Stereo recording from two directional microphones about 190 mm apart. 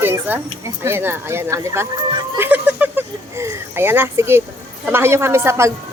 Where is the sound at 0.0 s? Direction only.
10° right (ahead or behind).